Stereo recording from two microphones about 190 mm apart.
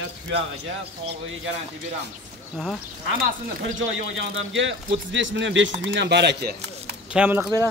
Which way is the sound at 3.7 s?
85° right.